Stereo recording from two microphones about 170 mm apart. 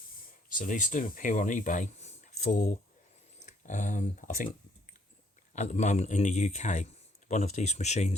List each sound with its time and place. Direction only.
0.5 s speech: 50° left (ahead or behind)
5.5 s a man's voice: 40° left (ahead or behind)